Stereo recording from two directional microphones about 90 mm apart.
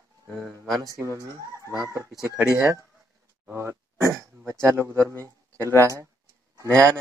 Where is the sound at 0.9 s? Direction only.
35° right (ahead or behind).